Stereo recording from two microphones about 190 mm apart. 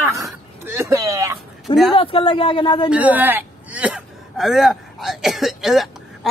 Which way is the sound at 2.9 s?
10° right (ahead or behind).